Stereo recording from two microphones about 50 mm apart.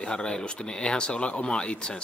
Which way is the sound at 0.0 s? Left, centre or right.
Centre.